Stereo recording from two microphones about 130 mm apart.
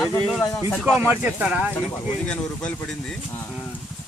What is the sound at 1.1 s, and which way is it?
Speech, 10° right (ahead or behind).